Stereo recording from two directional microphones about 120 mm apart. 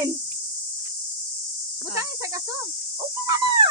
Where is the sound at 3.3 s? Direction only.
40° right (ahead or behind).